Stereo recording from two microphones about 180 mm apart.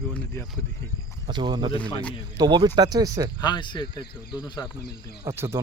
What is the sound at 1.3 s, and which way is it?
Speech, 25° right (ahead or behind).